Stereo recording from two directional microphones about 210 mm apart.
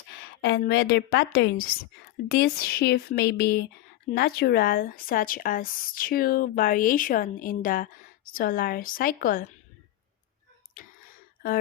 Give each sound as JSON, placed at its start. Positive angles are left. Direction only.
{"t": 0.4, "sound": "a woman's voice", "side_deg": 50}